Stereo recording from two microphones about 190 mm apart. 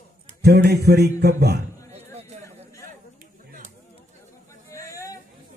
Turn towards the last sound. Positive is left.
turn(degrees=15)  # may be behind; listen again after turning